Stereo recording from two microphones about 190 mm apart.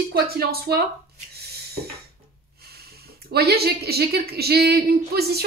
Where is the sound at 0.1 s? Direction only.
55° right (ahead or behind).